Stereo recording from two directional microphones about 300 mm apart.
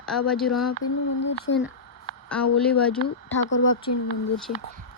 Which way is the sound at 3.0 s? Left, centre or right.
Left.